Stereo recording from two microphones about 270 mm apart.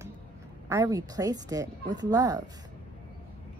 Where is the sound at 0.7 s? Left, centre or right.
Centre.